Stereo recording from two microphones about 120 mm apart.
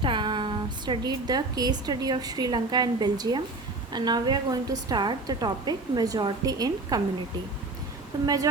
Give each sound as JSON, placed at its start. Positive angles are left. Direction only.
{"t": 0.0, "sound": "a woman's voice", "side_deg": -40}